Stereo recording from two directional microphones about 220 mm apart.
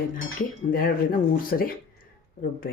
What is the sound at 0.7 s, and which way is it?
Speech, 40° left (ahead or behind).